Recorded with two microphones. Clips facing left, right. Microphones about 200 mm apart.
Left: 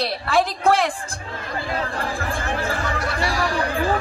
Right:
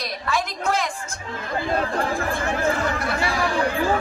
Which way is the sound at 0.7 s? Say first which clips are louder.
Left 5 dB; 30° left (ahead or behind).